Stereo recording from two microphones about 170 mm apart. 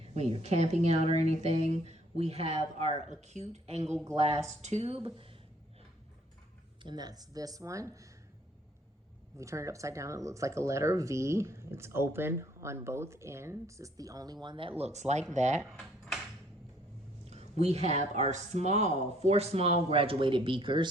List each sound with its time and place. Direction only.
0.1 s speech: 40° right (ahead or behind)
6.8 s speech: 25° right (ahead or behind)
9.4 s speech: 20° right (ahead or behind); by 15.6 s 45° right (ahead or behind)
15.7 s cutlery: centre (ahead or behind)
17.2 s speech: 40° right (ahead or behind)